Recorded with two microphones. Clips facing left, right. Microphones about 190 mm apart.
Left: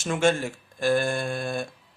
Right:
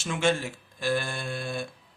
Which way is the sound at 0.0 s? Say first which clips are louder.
Left 3 dB; 45° left (ahead or behind).